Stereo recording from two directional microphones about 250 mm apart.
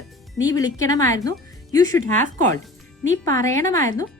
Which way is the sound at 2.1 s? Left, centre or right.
Right.